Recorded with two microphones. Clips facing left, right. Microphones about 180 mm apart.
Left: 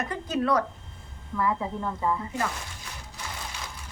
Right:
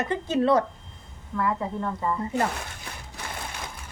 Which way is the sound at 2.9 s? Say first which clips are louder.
Right 3 dB; 55° right (ahead or behind).